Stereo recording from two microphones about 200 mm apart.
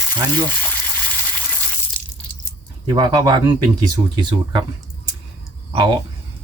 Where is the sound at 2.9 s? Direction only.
20° right (ahead or behind).